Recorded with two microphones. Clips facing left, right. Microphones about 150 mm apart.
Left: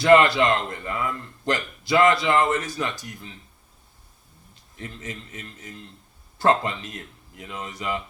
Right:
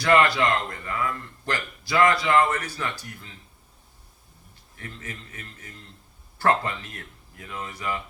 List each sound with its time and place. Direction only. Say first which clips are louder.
0.0 s a man's voice: left 4 dB; 20° left (ahead or behind)
4.8 s a man's voice: left 3 dB; 20° left (ahead or behind)